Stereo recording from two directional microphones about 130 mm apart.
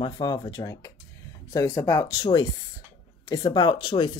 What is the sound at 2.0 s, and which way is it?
Speech, 30° left (ahead or behind).